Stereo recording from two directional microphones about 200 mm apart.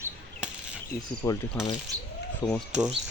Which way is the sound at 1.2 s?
15° left (ahead or behind).